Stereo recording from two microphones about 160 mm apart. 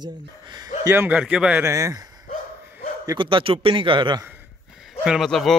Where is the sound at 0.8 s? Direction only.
15° right (ahead or behind).